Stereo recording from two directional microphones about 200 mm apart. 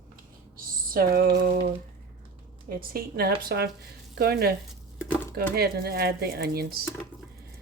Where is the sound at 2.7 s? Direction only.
50° right (ahead or behind).